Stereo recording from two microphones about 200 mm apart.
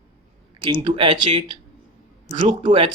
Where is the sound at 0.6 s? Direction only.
25° right (ahead or behind).